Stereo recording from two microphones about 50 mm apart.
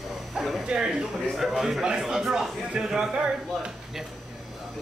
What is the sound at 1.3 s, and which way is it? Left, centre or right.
A man's voice, centre.